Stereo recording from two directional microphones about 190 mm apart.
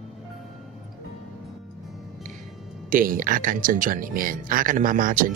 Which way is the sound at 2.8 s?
45° right (ahead or behind).